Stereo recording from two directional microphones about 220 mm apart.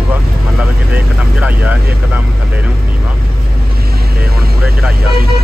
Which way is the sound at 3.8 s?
45° right (ahead or behind).